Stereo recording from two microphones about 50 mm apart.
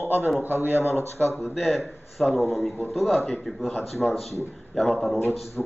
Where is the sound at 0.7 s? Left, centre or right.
Left.